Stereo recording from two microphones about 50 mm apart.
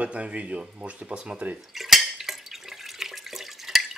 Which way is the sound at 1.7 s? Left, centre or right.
Centre.